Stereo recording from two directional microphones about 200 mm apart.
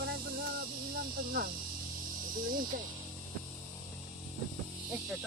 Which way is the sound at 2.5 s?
45° right (ahead or behind).